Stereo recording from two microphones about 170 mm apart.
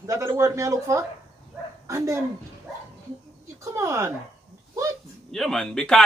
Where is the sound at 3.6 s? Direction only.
15° right (ahead or behind).